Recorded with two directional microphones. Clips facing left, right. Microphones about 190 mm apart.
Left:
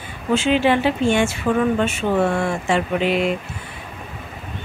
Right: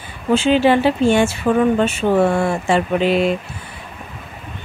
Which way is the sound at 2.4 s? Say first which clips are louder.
Right 3 dB; 35° right (ahead or behind).